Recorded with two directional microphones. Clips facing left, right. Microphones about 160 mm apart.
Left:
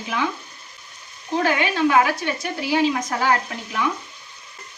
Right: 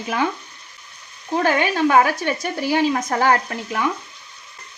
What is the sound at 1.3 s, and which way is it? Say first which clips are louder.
Speech: right 2 dB; 45° right (ahead or behind).